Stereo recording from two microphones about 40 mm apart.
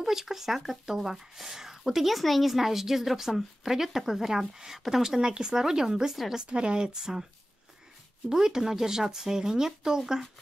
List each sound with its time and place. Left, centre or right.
0.0 s speech: centre
6.4 s speech: right
8.3 s speech: centre